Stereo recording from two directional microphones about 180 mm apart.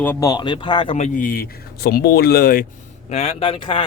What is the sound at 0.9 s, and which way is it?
Speech, 40° left (ahead or behind).